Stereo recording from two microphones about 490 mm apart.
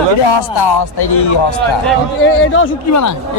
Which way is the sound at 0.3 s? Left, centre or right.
Left.